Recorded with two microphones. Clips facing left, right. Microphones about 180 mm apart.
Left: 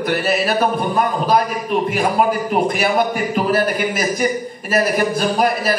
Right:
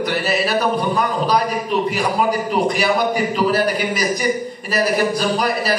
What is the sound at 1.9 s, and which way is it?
A man's voice, 50° left (ahead or behind).